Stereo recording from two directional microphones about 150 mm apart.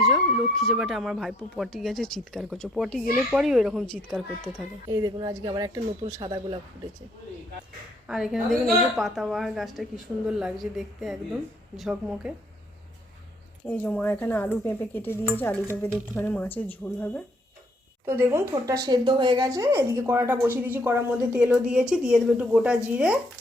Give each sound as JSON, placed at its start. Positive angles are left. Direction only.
{"t": 0.0, "sound": "speech", "side_deg": 0}
{"t": 4.9, "sound": "speech", "side_deg": -25}
{"t": 8.0, "sound": "speech", "side_deg": -5}
{"t": 13.7, "sound": "speech", "side_deg": 10}
{"t": 18.0, "sound": "speech", "side_deg": -15}
{"t": 21.5, "sound": "speech", "side_deg": -5}